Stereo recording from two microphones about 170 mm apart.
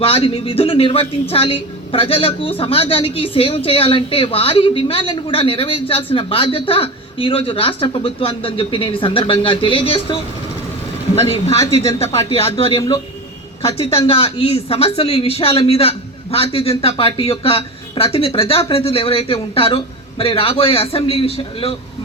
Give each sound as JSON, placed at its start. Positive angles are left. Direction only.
{"t": 0.0, "sound": "a woman's voice", "side_deg": 35}